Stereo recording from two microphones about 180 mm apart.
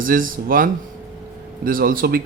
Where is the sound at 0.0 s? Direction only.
50° right (ahead or behind).